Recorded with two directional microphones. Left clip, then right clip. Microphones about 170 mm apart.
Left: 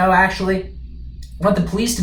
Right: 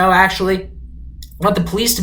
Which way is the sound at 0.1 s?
15° right (ahead or behind).